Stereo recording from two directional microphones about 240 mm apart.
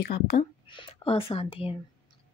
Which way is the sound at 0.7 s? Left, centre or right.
Left.